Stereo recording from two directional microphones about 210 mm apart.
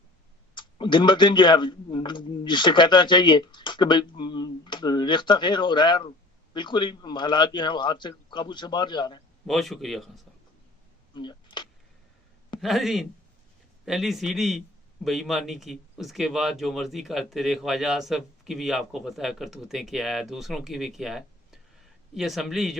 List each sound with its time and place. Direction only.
0.5 s speech: 20° left (ahead or behind)
9.5 s speech: centre (ahead or behind)
11.1 s a sound: 20° left (ahead or behind)
12.5 s speech: centre (ahead or behind)